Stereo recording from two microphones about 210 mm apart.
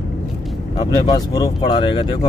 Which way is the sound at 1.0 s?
20° left (ahead or behind).